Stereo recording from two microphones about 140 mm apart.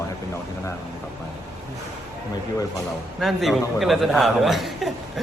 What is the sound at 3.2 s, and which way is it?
A man's voice, centre (ahead or behind).